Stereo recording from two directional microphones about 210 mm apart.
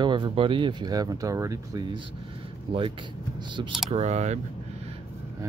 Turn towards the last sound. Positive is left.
turn(degrees=-30)  # may be behind; listen again after turning